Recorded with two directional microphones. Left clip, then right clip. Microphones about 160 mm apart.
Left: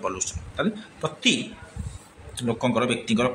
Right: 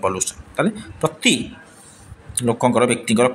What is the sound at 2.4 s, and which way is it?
Speech, 35° right (ahead or behind).